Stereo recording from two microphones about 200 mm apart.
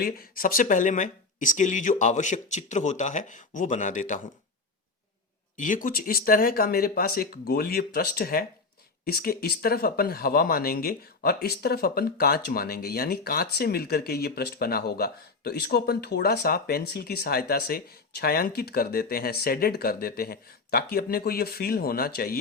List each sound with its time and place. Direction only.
0.0 s speech: 45° left (ahead or behind)
5.5 s speech: 40° left (ahead or behind)